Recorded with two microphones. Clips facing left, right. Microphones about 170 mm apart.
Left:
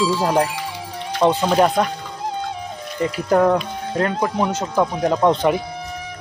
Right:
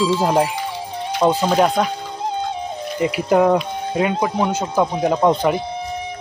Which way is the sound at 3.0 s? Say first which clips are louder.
Right 1 dB; 10° right (ahead or behind).